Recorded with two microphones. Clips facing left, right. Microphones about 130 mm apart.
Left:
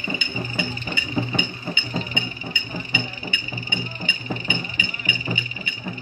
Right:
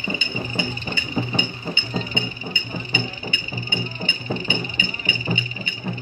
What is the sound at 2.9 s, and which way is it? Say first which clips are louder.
Music: right 2 dB; 30° right (ahead or behind).